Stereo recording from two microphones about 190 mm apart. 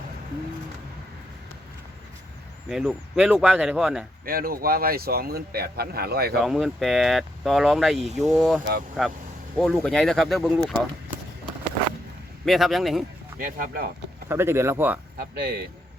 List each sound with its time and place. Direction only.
2.6 s speech: centre (ahead or behind)
4.3 s speech: 50° right (ahead or behind)
6.4 s speech: centre (ahead or behind)
12.5 s speech: centre (ahead or behind)
13.4 s speech: 45° right (ahead or behind)
14.3 s speech: 15° right (ahead or behind)
15.2 s speech: 55° right (ahead or behind)